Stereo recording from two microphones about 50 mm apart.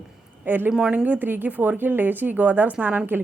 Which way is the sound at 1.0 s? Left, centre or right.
Right.